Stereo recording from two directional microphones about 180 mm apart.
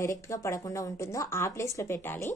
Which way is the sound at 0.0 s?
15° left (ahead or behind).